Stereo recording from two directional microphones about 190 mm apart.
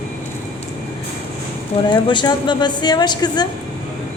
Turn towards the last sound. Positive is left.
turn(degrees=20)  # may be behind; listen again after turning